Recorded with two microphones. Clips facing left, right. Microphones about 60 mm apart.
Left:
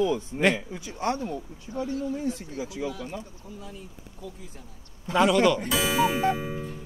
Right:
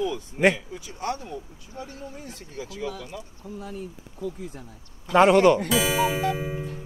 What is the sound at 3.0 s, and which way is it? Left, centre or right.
Speech, left.